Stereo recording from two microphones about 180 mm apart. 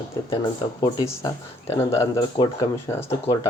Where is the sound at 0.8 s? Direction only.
20° left (ahead or behind).